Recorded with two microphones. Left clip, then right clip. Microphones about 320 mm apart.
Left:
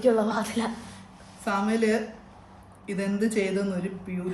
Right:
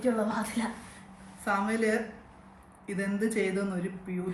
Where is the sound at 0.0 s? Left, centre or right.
Left.